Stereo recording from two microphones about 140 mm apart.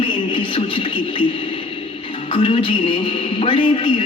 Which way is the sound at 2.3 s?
40° left (ahead or behind).